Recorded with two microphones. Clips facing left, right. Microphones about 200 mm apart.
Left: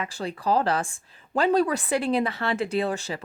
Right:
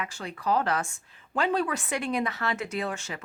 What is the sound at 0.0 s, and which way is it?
Speech, 35° left (ahead or behind).